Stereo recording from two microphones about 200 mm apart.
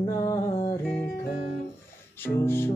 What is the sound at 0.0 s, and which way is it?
Music, 15° left (ahead or behind).